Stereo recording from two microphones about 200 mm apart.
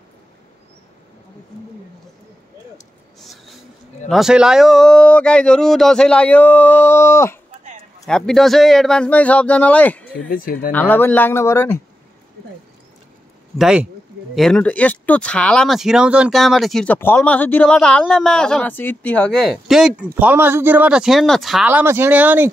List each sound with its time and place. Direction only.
4.1 s speech: 5° right (ahead or behind); by 7.3 s 15° left (ahead or behind)
8.1 s speech: centre (ahead or behind)
10.3 s speech: 45° left (ahead or behind)
10.7 s speech: 10° left (ahead or behind)
13.6 s speech: 5° right (ahead or behind)
21.6 s speech: 10° right (ahead or behind)